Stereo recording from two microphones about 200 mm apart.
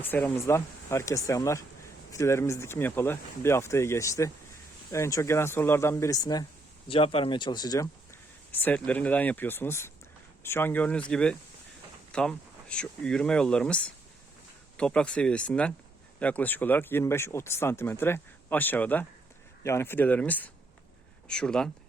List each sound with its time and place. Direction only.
0.1 s speech: 10° left (ahead or behind)
8.5 s speech: 10° left (ahead or behind)